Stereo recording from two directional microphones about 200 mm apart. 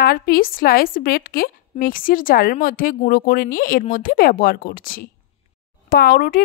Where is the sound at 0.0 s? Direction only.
45° left (ahead or behind).